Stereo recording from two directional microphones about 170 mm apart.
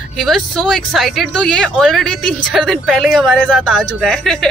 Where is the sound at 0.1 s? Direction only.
Centre (ahead or behind).